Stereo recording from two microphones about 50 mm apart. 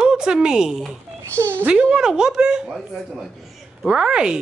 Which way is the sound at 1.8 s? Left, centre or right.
Centre.